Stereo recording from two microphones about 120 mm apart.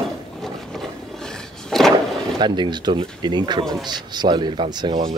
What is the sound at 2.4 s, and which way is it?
A man's voice, 40° right (ahead or behind).